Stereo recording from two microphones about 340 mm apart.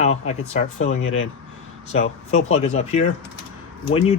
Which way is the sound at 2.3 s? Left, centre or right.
Centre.